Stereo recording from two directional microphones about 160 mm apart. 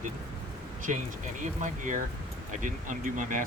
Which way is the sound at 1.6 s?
50° right (ahead or behind).